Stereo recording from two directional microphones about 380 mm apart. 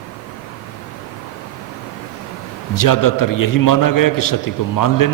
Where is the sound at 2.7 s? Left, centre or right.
Left.